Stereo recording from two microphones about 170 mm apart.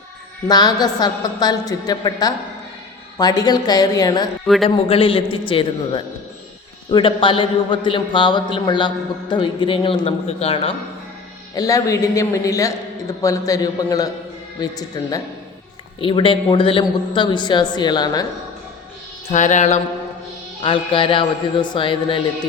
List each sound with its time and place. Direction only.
0.4 s a man's voice: 25° left (ahead or behind)
4.4 s a man's voice: centre (ahead or behind)
4.9 s a man's voice: 30° left (ahead or behind)
11.5 s a man's voice: 20° left (ahead or behind)
19.3 s music: 45° left (ahead or behind)
20.6 s a man's voice: 30° left (ahead or behind)